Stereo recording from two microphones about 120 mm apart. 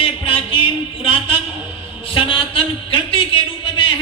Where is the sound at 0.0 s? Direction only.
45° left (ahead or behind).